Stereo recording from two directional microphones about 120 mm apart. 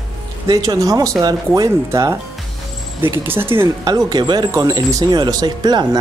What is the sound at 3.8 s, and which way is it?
A woman's voice, 35° right (ahead or behind).